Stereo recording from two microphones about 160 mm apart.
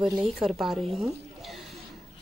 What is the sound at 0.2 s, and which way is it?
Speech, centre (ahead or behind).